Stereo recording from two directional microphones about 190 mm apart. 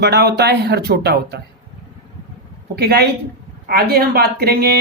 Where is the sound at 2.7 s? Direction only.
55° right (ahead or behind).